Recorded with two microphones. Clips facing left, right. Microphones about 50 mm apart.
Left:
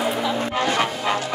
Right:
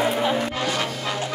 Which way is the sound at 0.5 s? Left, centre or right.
Left.